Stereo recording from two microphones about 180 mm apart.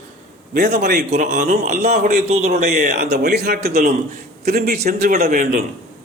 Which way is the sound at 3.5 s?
60° right (ahead or behind).